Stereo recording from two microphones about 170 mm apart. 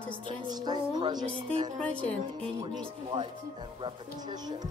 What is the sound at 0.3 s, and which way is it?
Speech, 25° right (ahead or behind).